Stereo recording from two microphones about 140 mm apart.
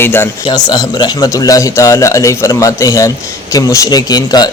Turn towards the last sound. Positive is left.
turn(degrees=30)  # may be behind; listen again after turning